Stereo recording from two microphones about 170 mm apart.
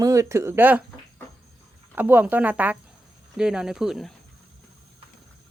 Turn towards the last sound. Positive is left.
turn(degrees=0)  # may be behind; listen again after turning